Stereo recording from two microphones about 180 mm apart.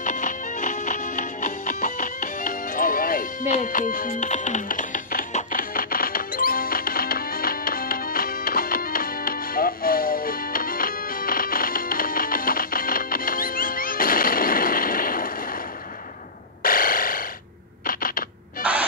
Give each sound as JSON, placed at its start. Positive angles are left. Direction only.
{"t": 0.0, "sound": "music", "side_deg": 45}
{"t": 16.6, "sound": "a sound", "side_deg": 50}
{"t": 18.6, "sound": "owl", "side_deg": -10}